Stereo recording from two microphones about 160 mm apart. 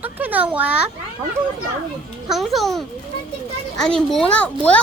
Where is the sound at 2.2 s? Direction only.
Centre (ahead or behind).